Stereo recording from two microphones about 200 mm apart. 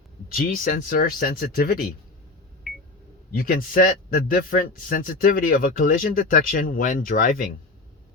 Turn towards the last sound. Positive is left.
turn(degrees=45)  # may be behind; listen again after turning